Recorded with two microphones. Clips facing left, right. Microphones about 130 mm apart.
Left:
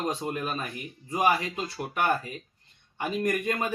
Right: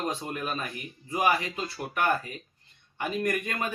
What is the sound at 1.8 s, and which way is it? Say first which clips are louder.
Speech: even; 15° left (ahead or behind).